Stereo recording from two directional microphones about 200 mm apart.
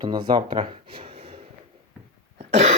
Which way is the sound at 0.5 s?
25° right (ahead or behind).